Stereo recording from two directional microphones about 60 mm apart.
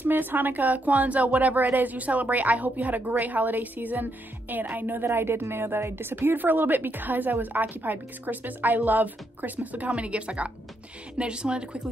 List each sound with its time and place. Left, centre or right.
0.0 s speech: right
5.0 s a woman's voice: right; by 11.9 s centre